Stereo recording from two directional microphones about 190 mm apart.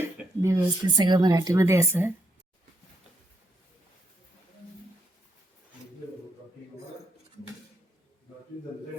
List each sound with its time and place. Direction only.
0.0 s speech: 15° right (ahead or behind)